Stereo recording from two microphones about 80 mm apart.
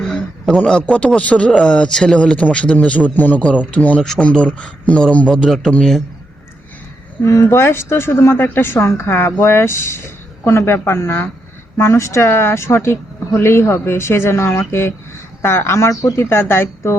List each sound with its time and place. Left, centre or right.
0.0 s a sound: centre
0.6 s a man's voice: centre
7.2 s speech: left